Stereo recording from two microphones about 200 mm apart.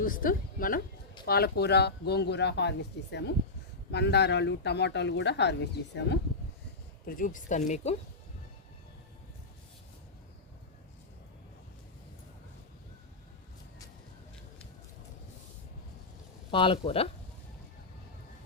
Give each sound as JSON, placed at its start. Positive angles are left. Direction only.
{"t": 0.0, "sound": "a woman's voice", "side_deg": 45}
{"t": 7.0, "sound": "speech", "side_deg": 45}
{"t": 16.5, "sound": "speech", "side_deg": 25}